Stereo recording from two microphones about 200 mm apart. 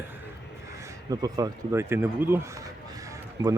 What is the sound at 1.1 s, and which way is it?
Speech, 20° right (ahead or behind).